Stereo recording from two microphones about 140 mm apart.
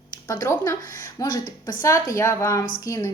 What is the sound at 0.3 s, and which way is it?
A woman's voice, 20° left (ahead or behind).